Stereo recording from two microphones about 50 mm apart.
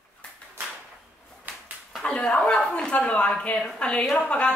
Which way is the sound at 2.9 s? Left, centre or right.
Left.